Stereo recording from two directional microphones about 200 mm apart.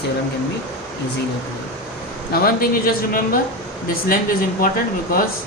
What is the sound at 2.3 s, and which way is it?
A man's voice, 45° left (ahead or behind).